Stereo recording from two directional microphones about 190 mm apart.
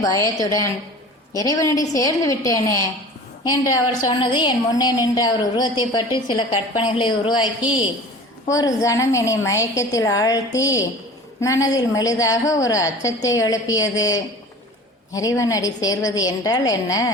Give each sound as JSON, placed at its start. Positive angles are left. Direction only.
{"t": 0.0, "sound": "a woman's voice", "side_deg": 15}
{"t": 8.4, "sound": "a woman's voice", "side_deg": 15}